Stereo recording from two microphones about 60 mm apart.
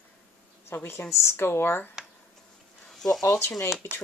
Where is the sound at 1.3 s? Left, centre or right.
Left.